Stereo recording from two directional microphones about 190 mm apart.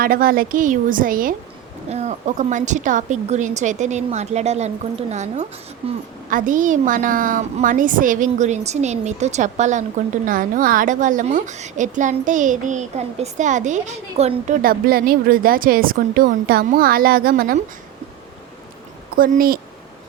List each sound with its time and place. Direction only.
0.0 s a woman's voice: 50° right (ahead or behind)
19.1 s a woman's voice: 50° right (ahead or behind)